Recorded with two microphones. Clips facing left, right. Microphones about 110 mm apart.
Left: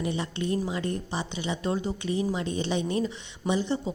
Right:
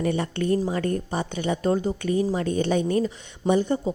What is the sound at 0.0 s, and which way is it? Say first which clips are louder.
A woman's voice: right 5 dB; 55° right (ahead or behind).